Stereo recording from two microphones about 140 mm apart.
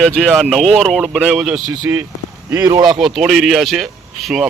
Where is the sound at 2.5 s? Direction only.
25° right (ahead or behind).